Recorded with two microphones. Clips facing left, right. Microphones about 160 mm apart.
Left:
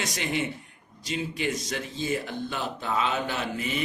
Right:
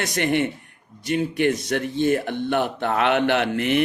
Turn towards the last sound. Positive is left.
turn(degrees=-70)  # may be behind; listen again after turning